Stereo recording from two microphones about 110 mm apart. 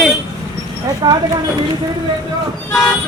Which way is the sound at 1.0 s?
40° right (ahead or behind).